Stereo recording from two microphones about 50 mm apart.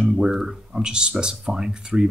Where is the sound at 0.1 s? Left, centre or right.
Centre.